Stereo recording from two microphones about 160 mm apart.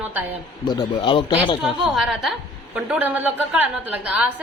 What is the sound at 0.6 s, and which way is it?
Speech, 30° left (ahead or behind).